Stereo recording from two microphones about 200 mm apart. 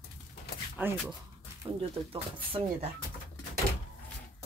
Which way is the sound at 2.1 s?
30° right (ahead or behind).